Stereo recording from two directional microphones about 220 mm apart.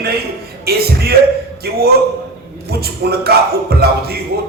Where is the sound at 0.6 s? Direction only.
45° right (ahead or behind).